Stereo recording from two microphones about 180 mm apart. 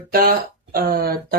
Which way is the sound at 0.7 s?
55° right (ahead or behind).